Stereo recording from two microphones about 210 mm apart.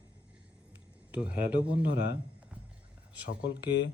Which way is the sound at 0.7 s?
5° right (ahead or behind).